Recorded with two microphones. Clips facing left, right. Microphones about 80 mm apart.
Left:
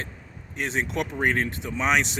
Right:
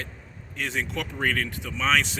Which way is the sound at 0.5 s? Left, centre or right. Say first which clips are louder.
Left 3 dB; left.